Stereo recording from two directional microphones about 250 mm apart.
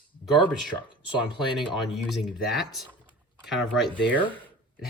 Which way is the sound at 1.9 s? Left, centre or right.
Centre.